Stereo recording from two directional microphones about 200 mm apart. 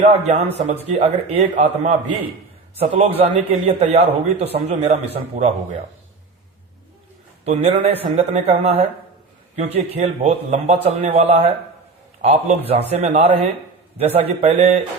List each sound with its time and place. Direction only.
0.1 s a man's voice: 35° right (ahead or behind)
3.0 s a man's voice: 30° right (ahead or behind)
7.4 s a man's voice: 30° right (ahead or behind)